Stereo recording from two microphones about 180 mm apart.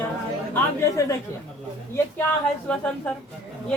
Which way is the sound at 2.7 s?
10° left (ahead or behind).